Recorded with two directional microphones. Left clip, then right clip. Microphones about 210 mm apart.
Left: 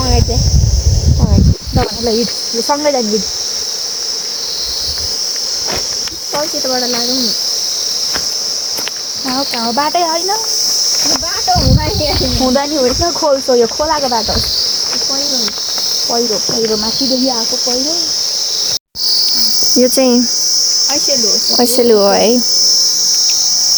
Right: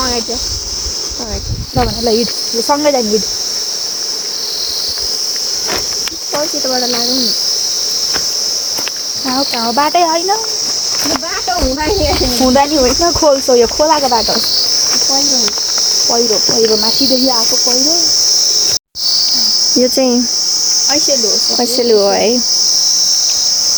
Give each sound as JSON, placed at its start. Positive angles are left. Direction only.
{"t": 2.6, "sound": "cricket", "side_deg": 0}
{"t": 9.7, "sound": "cricket", "side_deg": 10}
{"t": 12.5, "sound": "cricket", "side_deg": 0}
{"t": 19.8, "sound": "cricket", "side_deg": 5}
{"t": 21.5, "sound": "cricket", "side_deg": 15}